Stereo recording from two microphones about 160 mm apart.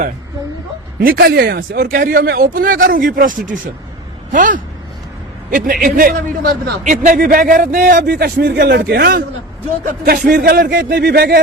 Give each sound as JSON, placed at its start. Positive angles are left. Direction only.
{"t": 0.9, "sound": "a man's voice", "side_deg": -65}
{"t": 10.0, "sound": "speech", "side_deg": -70}